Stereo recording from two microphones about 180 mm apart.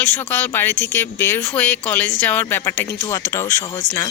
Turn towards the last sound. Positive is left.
turn(degrees=15)  # may be behind; listen again after turning